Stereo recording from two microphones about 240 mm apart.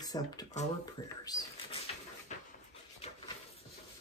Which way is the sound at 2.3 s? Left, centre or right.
Left.